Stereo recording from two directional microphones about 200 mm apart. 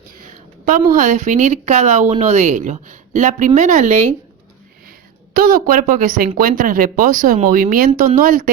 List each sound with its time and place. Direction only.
0.3 s a sound: 40° right (ahead or behind)
0.9 s speech: 40° right (ahead or behind)
5.3 s speech: 45° right (ahead or behind)